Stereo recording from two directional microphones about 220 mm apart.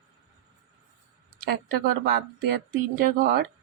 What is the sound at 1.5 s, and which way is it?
A woman's voice, 40° right (ahead or behind).